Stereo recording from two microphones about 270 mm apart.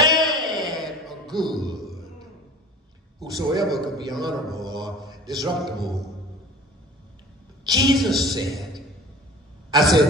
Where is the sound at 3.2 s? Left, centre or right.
Centre.